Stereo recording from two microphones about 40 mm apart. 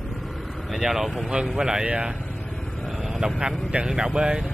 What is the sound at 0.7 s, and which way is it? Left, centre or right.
Speech, centre.